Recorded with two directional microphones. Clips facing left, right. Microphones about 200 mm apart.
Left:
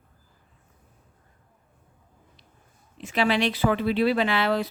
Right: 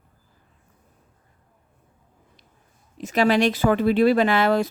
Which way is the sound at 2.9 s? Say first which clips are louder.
Right 5 dB; 40° right (ahead or behind).